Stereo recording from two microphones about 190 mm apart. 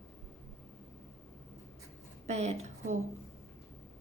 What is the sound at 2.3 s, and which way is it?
Speech, 35° right (ahead or behind).